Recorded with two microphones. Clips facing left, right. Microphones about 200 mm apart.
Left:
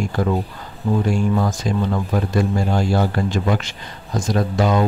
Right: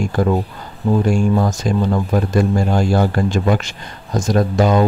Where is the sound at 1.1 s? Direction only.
45° right (ahead or behind).